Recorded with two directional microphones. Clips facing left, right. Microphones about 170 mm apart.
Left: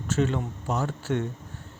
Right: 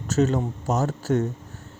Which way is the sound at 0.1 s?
40° right (ahead or behind).